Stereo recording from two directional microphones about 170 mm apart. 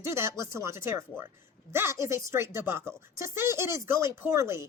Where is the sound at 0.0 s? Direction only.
15° right (ahead or behind).